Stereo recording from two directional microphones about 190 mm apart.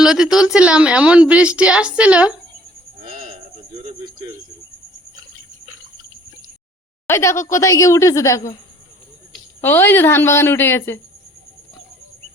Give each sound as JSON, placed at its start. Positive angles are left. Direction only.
{"t": 0.0, "sound": "a woman's voice", "side_deg": -5}
{"t": 7.1, "sound": "a woman's voice", "side_deg": 15}